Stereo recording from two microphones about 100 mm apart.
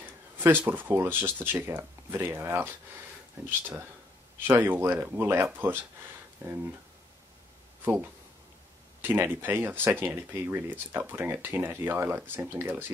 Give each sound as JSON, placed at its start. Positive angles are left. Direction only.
{"t": 0.0, "sound": "a sound", "side_deg": -20}
{"t": 0.7, "sound": "speech", "side_deg": -20}
{"t": 9.0, "sound": "speech", "side_deg": -20}